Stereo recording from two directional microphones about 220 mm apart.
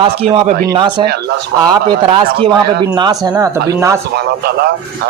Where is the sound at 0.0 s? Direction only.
25° right (ahead or behind).